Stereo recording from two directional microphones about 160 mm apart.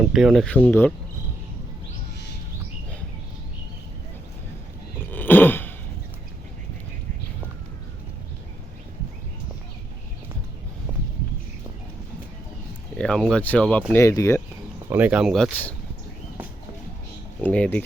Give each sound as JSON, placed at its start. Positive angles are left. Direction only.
{"t": 0.0, "sound": "speech", "side_deg": -5}
{"t": 4.9, "sound": "a sound", "side_deg": 10}
{"t": 10.9, "sound": "a sound", "side_deg": -10}
{"t": 13.0, "sound": "speech", "side_deg": 5}
{"t": 13.9, "sound": "speech", "side_deg": 20}
{"t": 14.8, "sound": "speech", "side_deg": -10}
{"t": 17.4, "sound": "speech", "side_deg": 10}